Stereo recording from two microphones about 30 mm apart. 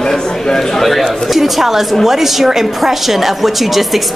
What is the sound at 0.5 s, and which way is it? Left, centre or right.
Speech, centre.